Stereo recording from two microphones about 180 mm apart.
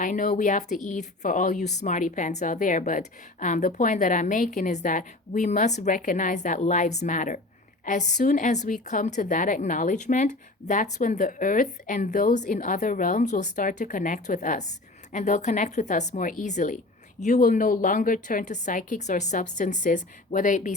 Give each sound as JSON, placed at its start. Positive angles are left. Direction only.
{"t": 0.0, "sound": "speech", "side_deg": 45}